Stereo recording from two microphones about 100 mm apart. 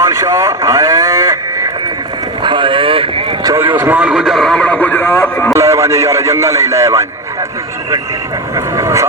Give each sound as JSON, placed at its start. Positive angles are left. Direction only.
{"t": 0.0, "sound": "a sound", "side_deg": -35}
{"t": 2.4, "sound": "boat", "side_deg": -50}
{"t": 3.8, "sound": "a man's voice", "side_deg": -15}
{"t": 5.5, "sound": "a man's voice", "side_deg": -30}
{"t": 8.5, "sound": "speech", "side_deg": -30}